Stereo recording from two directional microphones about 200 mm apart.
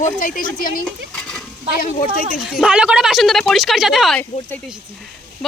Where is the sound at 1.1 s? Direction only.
5° left (ahead or behind).